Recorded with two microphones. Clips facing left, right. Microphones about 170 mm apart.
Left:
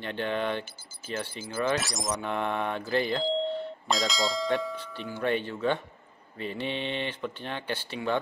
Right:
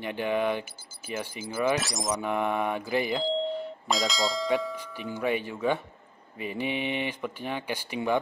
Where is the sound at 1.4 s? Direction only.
Centre (ahead or behind).